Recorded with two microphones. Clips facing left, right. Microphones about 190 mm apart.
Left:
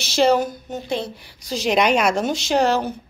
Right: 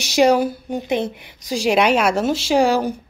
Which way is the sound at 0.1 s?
15° right (ahead or behind).